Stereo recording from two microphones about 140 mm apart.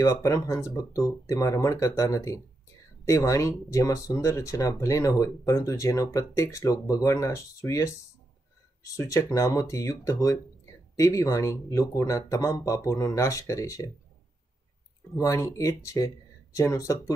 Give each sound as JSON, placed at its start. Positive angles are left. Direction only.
{"t": 0.0, "sound": "speech", "side_deg": 20}
{"t": 15.1, "sound": "speech", "side_deg": 20}